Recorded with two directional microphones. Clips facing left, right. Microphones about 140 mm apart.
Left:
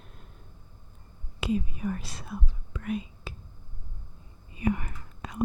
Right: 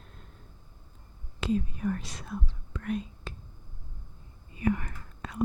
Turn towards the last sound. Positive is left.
turn(degrees=15)  # may be behind; listen again after turning